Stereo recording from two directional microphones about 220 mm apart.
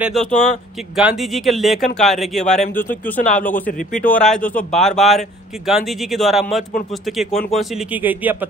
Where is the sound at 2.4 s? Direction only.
30° left (ahead or behind).